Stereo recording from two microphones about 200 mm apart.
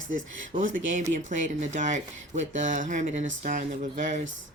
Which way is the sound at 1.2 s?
35° right (ahead or behind).